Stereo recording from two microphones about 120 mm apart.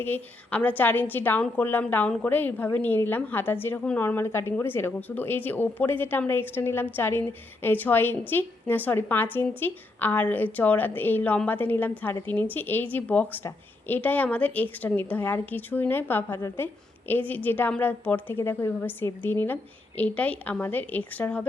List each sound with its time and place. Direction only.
0.0 s a woman's voice: 15° left (ahead or behind)